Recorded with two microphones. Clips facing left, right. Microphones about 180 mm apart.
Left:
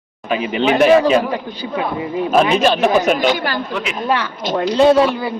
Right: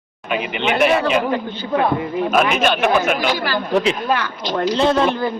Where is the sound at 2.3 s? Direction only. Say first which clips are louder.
Left 4 dB; 30° left (ahead or behind).